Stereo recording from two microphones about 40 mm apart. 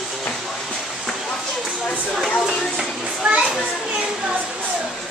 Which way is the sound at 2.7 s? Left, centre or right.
Centre.